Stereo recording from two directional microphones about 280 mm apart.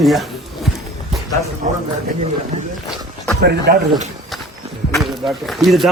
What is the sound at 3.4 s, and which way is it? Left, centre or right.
Speech, right.